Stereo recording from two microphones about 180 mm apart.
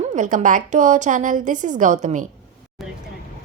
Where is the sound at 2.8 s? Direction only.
Centre (ahead or behind).